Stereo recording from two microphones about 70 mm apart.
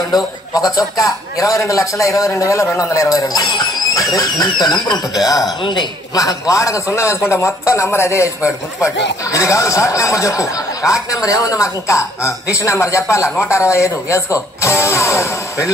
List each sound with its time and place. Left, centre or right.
0.1 s speech: left
3.9 s speech: left